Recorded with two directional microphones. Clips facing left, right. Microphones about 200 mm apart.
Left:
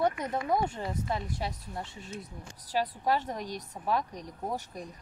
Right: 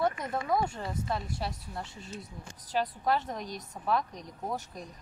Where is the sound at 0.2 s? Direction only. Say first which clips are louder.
Left 1 dB; 15° left (ahead or behind).